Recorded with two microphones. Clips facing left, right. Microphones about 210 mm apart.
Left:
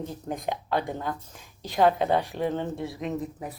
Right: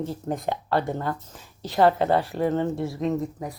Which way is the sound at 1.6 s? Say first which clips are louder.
Right 2 dB; 15° left (ahead or behind).